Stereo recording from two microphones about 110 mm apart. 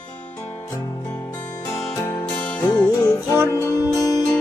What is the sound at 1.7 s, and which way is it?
Music, 25° left (ahead or behind).